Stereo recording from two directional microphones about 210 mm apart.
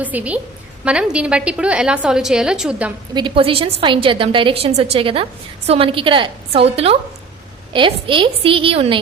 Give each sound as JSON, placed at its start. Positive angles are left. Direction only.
{"t": 0.0, "sound": "a woman's voice", "side_deg": -5}
{"t": 3.2, "sound": "a woman's voice", "side_deg": -25}